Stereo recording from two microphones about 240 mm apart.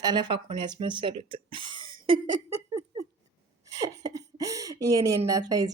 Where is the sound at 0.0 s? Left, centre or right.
Centre.